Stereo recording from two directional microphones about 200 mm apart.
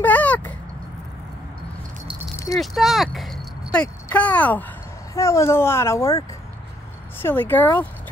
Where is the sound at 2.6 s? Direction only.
Centre (ahead or behind).